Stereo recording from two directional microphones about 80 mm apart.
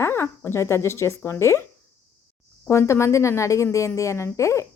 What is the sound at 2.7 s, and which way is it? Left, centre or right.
Speech, left.